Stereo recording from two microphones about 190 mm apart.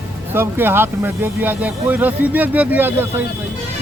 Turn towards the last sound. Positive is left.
turn(degrees=-10)  # may be behind; listen again after turning